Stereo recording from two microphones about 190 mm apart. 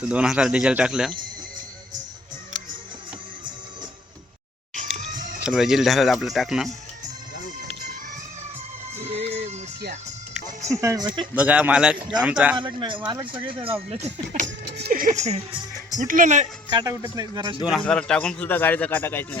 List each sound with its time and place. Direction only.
0.0 s speech: 5° right (ahead or behind)
5.4 s speech: 5° right (ahead or behind)
9.0 s music: 35° right (ahead or behind)
10.7 s speech: 15° right (ahead or behind)
11.3 s a man's voice: 10° right (ahead or behind)
12.5 s speech: 25° right (ahead or behind)
14.4 s speech: 60° right (ahead or behind); by 16.5 s 40° right (ahead or behind)
16.6 s speech: 20° right (ahead or behind)
17.7 s a man's voice: 5° left (ahead or behind)